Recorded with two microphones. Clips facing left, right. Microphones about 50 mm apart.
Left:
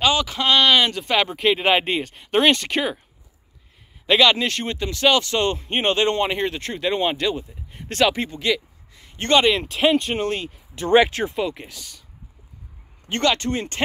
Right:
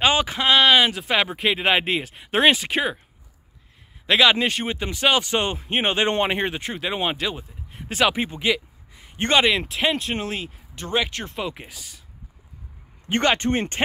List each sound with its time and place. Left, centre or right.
0.0 s speech: right
0.5 s speech: centre
4.0 s a man's voice: centre
6.0 s speech: right
6.6 s speech: centre
8.9 s a sound: right
9.5 s speech: centre
13.1 s speech: right